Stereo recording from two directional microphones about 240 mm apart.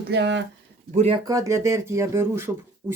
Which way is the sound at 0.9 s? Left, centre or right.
Right.